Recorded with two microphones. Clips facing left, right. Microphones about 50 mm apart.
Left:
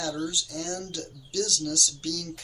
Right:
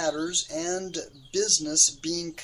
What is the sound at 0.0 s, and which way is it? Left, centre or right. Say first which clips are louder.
Speech: right 3 dB; right.